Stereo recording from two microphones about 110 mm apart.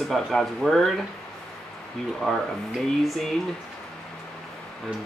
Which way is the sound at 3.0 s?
Centre (ahead or behind).